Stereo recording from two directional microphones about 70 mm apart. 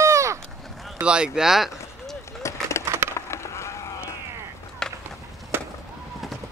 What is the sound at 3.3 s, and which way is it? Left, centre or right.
Vehicle, left.